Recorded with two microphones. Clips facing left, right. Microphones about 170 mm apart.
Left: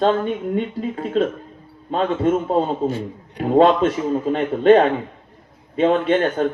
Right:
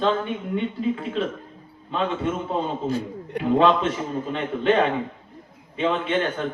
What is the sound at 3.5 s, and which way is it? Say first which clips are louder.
Speech: left 5 dB; 40° left (ahead or behind).